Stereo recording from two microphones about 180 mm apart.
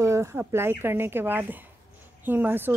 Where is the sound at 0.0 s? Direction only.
15° right (ahead or behind).